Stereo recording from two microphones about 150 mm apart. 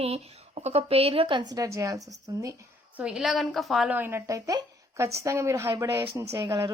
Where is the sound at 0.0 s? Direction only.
45° right (ahead or behind); by 2.6 s 20° right (ahead or behind).